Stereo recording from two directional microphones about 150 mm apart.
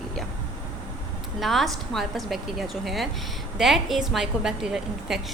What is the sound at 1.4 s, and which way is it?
A woman's voice, centre (ahead or behind).